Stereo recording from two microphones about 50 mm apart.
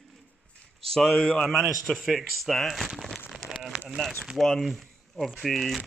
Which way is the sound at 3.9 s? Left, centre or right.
Centre.